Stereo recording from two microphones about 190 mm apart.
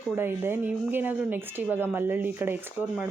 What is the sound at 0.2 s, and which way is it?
A woman's voice, 10° right (ahead or behind).